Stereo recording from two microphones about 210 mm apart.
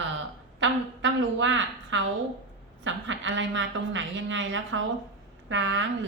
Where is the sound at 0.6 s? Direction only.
60° right (ahead or behind).